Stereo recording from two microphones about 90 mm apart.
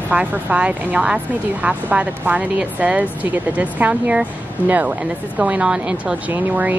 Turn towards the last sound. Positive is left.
turn(degrees=-20)  # may be behind; listen again after turning